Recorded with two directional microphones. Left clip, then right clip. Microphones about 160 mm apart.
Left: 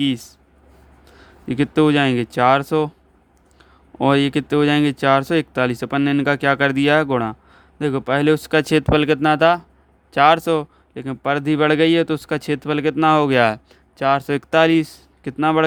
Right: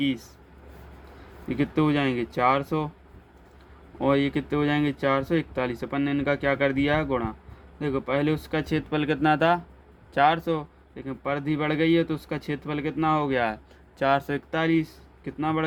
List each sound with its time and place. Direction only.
0.0 s speech: 90° left
1.5 s speech: 90° left
4.0 s speech: 90° left
14.0 s speech: 45° left (ahead or behind)
14.5 s speech: 90° left